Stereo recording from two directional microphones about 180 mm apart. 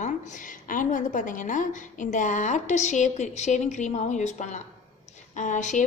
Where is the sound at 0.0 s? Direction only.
45° left (ahead or behind).